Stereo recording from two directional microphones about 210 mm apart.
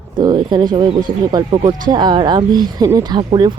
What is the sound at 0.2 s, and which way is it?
Speech, 20° right (ahead or behind).